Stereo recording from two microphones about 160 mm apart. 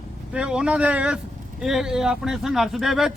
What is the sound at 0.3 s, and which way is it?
Speech, 5° right (ahead or behind).